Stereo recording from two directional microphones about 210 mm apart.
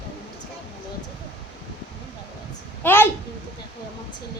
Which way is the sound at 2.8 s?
10° left (ahead or behind).